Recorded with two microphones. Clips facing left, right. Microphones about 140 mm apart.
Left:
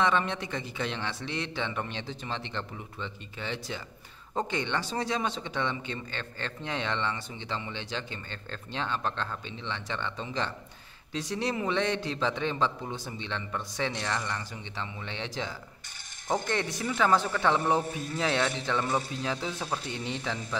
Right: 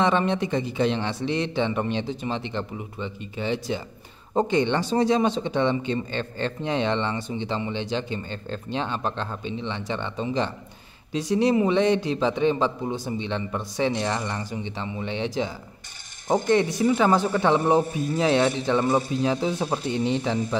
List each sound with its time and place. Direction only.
0.0 s a man's voice: 25° right (ahead or behind)